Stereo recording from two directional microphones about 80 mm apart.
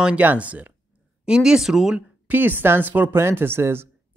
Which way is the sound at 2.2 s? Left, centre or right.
Right.